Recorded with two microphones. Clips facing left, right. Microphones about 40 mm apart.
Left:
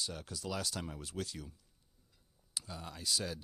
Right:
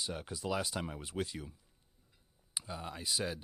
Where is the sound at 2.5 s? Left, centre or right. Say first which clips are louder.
Right 3 dB; right.